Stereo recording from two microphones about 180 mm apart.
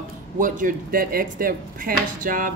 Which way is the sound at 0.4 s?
50° right (ahead or behind).